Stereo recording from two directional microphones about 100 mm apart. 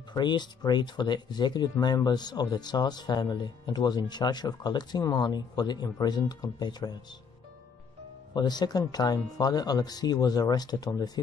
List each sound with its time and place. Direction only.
0.1 s speech: 50° left (ahead or behind)
8.4 s speech: 45° left (ahead or behind)